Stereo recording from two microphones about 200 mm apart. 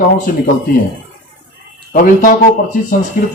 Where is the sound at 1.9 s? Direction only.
45° left (ahead or behind).